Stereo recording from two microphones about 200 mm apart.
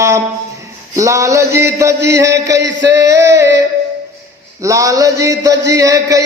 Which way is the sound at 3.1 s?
15° right (ahead or behind).